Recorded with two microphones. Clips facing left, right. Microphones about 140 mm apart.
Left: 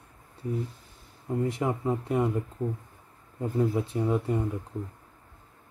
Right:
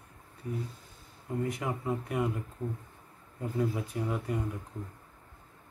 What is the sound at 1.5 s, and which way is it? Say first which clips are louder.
Speech: left 5 dB; 30° left (ahead or behind).